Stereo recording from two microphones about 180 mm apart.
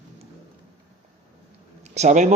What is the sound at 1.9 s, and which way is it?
Speech, 40° right (ahead or behind).